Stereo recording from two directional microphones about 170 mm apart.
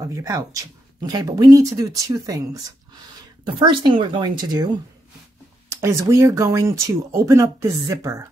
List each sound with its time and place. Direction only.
0.0 s speech: 20° right (ahead or behind)
3.8 s speech: 30° right (ahead or behind)
5.7 s speech: 15° right (ahead or behind)